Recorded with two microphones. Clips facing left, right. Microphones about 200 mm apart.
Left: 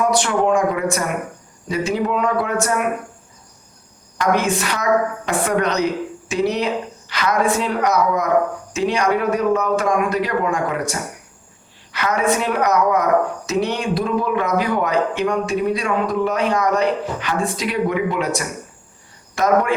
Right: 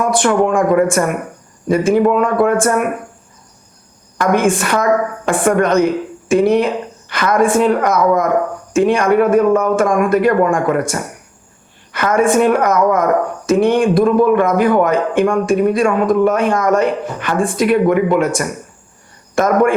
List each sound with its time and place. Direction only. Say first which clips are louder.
0.0 s a man's voice: right 4 dB; 50° right (ahead or behind)
4.2 s a man's voice: right 5 dB; 50° right (ahead or behind)